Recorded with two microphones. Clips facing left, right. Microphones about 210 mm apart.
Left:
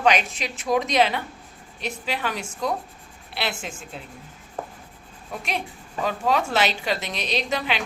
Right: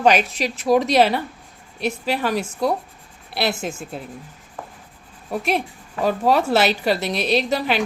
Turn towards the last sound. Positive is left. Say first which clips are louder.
# right 6 dB
turn(degrees=-40)  # may be behind; listen again after turning